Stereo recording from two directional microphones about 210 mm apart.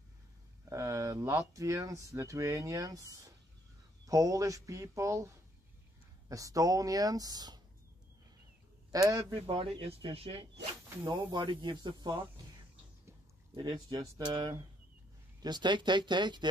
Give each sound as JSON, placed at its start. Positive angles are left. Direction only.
{"t": 0.7, "sound": "speech", "side_deg": -15}
{"t": 8.9, "sound": "speech", "side_deg": -15}
{"t": 9.6, "sound": "speech", "side_deg": -25}
{"t": 13.6, "sound": "speech", "side_deg": -15}